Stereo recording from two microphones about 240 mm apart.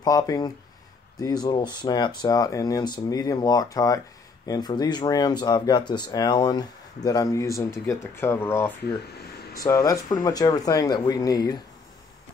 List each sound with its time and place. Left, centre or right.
0.0 s speech: centre